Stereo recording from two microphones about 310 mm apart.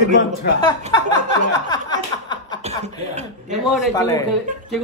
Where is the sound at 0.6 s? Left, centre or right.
Centre.